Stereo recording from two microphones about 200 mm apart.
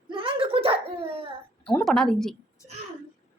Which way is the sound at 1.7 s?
5° left (ahead or behind).